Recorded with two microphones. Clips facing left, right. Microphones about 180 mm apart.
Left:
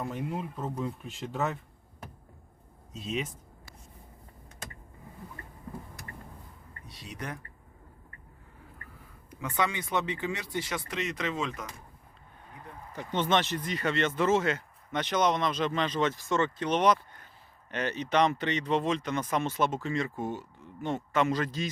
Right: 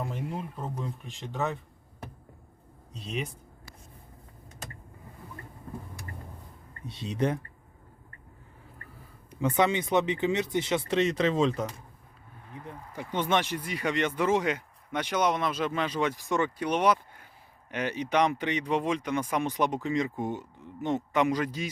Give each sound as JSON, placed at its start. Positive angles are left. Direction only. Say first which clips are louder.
{"t": 0.0, "sound": "speech", "louder": "left 1 dB", "side_deg": 0}
{"t": 2.9, "sound": "speech", "louder": "left 1 dB", "side_deg": 0}
{"t": 6.8, "sound": "speech", "louder": "right 11 dB", "side_deg": -25}
{"t": 9.4, "sound": "speech", "louder": "right 6 dB", "side_deg": -20}
{"t": 12.9, "sound": "speech", "louder": "even", "side_deg": -10}